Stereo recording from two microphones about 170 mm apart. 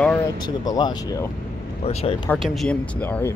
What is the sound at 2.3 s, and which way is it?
Speech, centre (ahead or behind).